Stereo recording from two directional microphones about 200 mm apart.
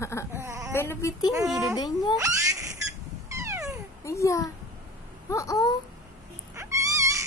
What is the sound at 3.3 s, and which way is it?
Cat, 15° right (ahead or behind).